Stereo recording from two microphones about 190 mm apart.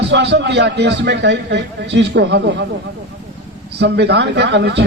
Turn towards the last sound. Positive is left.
turn(degrees=-60)  # may be behind; listen again after turning